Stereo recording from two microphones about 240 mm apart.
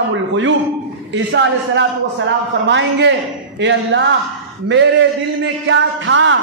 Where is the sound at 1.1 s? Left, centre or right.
Right.